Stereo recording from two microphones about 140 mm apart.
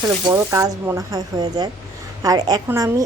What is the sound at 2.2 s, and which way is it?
Frying, 30° right (ahead or behind).